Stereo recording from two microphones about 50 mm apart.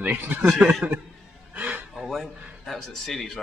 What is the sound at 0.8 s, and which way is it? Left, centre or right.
Speech, right.